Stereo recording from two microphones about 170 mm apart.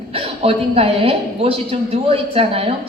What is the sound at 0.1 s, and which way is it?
A woman's voice, 35° right (ahead or behind).